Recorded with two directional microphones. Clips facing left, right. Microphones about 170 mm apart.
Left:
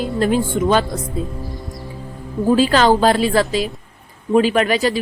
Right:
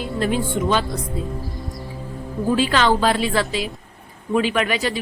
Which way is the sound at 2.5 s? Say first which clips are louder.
Left 5 dB; 40° left (ahead or behind).